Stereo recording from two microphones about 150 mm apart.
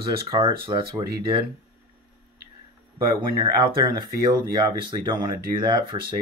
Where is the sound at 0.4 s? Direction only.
35° right (ahead or behind).